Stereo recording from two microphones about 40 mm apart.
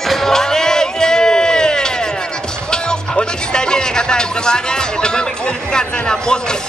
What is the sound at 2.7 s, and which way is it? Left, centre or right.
A man's voice, centre.